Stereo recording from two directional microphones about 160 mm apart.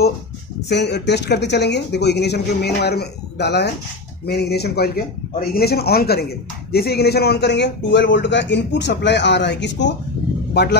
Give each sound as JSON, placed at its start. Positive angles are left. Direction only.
{"t": 0.7, "sound": "a man's voice", "side_deg": 90}